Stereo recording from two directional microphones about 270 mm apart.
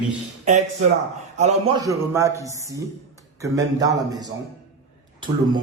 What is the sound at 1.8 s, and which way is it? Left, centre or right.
A man's voice, centre.